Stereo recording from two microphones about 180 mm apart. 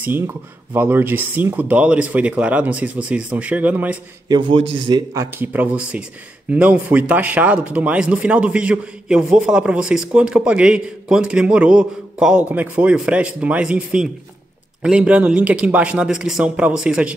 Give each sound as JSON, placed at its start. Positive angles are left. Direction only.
{"t": 0.0, "sound": "speech", "side_deg": -10}
{"t": 4.3, "sound": "speech", "side_deg": -25}